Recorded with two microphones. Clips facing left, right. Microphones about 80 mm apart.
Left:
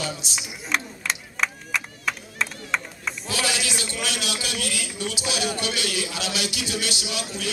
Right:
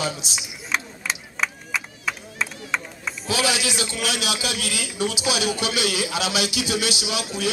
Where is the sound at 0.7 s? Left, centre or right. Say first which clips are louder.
Even; centre.